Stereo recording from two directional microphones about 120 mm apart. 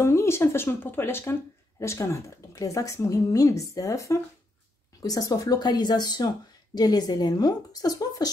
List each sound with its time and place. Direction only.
0.0 s a woman's voice: 20° left (ahead or behind)